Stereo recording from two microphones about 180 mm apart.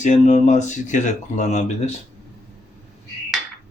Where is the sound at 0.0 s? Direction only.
40° left (ahead or behind).